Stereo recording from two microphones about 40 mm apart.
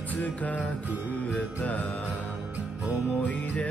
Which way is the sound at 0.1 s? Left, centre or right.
Left.